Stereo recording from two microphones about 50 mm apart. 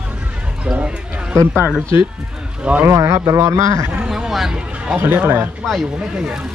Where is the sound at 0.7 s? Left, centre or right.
Centre.